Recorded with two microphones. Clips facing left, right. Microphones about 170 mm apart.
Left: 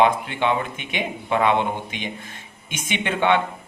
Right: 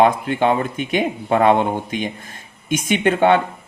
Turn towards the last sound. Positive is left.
turn(degrees=-40)  # may be behind; listen again after turning